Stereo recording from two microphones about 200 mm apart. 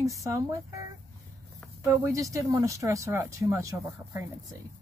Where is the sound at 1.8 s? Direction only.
15° right (ahead or behind).